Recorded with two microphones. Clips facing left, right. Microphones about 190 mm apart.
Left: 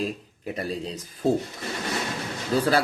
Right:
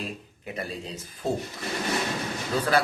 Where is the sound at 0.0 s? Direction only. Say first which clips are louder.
Left 6 dB; 35° left (ahead or behind).